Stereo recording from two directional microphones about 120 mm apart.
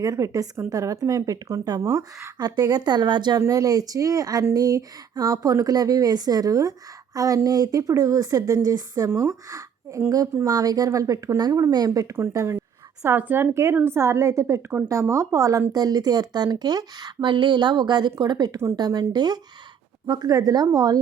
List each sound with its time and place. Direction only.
0.0 s a woman's voice: 30° right (ahead or behind)